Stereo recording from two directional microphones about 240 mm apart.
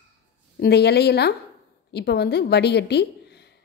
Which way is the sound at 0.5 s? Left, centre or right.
Left.